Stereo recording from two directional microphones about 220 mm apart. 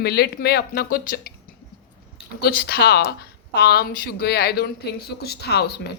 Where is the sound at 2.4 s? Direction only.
45° left (ahead or behind).